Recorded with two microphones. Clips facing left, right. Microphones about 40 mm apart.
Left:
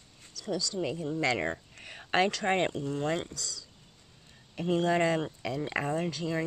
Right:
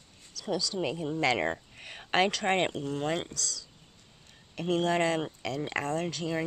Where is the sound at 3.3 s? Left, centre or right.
Centre.